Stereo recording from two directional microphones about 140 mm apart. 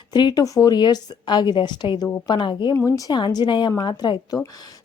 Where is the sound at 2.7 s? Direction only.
20° left (ahead or behind).